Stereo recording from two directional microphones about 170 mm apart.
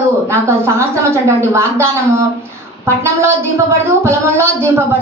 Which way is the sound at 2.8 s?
15° right (ahead or behind).